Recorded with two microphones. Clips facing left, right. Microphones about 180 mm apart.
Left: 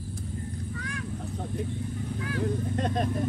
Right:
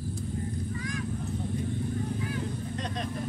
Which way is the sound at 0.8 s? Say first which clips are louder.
Right 2 dB; 65° left (ahead or behind).